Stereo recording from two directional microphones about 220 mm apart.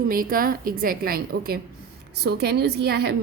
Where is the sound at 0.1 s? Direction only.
40° right (ahead or behind).